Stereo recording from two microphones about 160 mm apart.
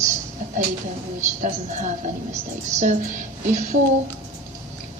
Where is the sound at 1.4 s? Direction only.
50° right (ahead or behind).